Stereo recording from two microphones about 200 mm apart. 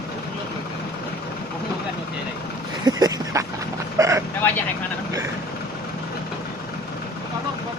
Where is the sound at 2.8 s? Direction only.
20° right (ahead or behind).